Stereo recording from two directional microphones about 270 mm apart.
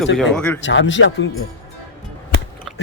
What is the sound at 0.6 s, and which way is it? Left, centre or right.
Speech, left.